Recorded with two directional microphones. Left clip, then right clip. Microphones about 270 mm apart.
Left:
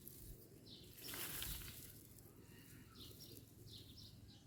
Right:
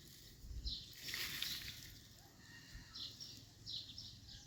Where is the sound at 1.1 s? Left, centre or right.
Centre.